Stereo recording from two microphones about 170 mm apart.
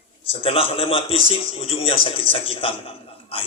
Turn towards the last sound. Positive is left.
turn(degrees=30)  # may be behind; listen again after turning